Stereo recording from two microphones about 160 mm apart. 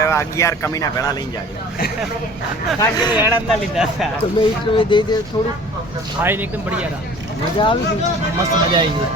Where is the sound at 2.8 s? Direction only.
25° left (ahead or behind).